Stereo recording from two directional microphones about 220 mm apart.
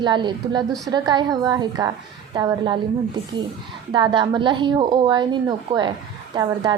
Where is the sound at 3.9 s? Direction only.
20° right (ahead or behind).